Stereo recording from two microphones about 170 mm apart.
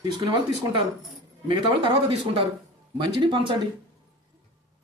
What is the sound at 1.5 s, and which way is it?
Speech, 30° right (ahead or behind).